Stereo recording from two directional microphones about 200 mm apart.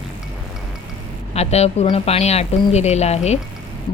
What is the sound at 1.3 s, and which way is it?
A woman's voice, 30° left (ahead or behind).